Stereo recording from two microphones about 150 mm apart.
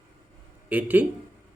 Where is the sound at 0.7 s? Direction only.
10° right (ahead or behind).